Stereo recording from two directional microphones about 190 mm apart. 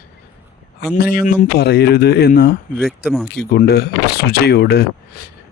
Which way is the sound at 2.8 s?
Centre (ahead or behind).